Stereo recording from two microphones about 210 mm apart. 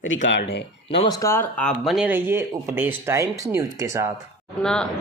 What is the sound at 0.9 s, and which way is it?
Speech, 25° left (ahead or behind).